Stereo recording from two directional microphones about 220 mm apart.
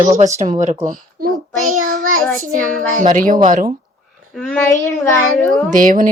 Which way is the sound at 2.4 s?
35° right (ahead or behind).